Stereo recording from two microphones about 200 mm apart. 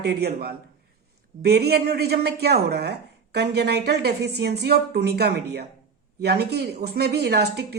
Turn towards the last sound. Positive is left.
turn(degrees=-55)  # may be behind; listen again after turning